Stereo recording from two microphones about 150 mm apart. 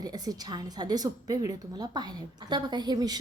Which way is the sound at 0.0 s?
25° right (ahead or behind).